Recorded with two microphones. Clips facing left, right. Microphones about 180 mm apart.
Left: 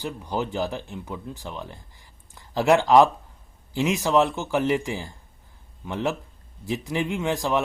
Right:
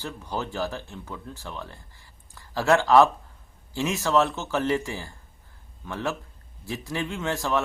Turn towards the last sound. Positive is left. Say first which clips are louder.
# left 3 dB
turn(degrees=15)  # may be behind; listen again after turning